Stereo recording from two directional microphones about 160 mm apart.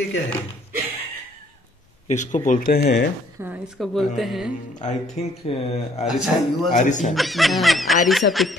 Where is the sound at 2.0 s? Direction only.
50° left (ahead or behind).